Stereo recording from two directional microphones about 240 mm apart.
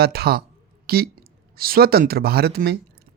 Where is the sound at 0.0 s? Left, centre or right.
Right.